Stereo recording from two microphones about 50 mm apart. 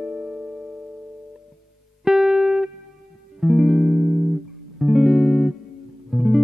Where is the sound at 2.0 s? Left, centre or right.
Centre.